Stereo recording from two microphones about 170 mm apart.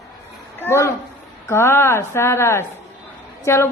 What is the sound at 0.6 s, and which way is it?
A woman's voice, 15° left (ahead or behind).